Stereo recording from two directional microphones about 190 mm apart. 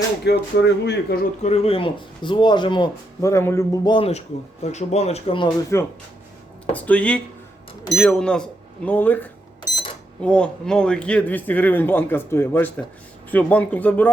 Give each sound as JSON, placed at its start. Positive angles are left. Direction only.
{"t": 0.3, "sound": "speech", "side_deg": 60}
{"t": 1.4, "sound": "speech", "side_deg": 35}
{"t": 3.9, "sound": "speech", "side_deg": 30}
{"t": 5.7, "sound": "a man's voice", "side_deg": 15}